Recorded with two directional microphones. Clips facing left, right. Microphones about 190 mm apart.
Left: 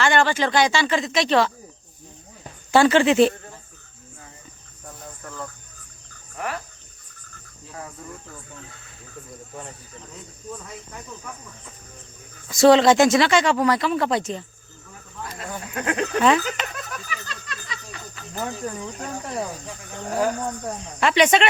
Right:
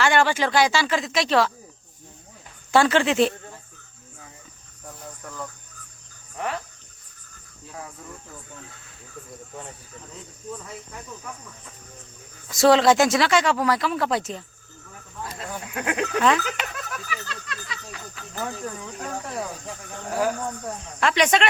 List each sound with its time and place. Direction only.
0.0 s speech: 10° right (ahead or behind)
2.7 s speech: centre (ahead or behind)
5.2 s cricket: centre (ahead or behind)
12.5 s speech: centre (ahead or behind)
15.4 s speech: 5° right (ahead or behind)
16.0 s a sound: 5° left (ahead or behind)
18.9 s speech: centre (ahead or behind)